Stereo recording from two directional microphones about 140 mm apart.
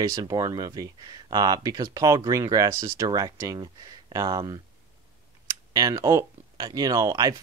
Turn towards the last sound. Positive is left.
turn(degrees=-25)  # may be behind; listen again after turning